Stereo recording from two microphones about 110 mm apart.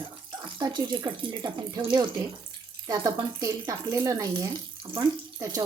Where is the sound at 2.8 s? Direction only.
35° right (ahead or behind).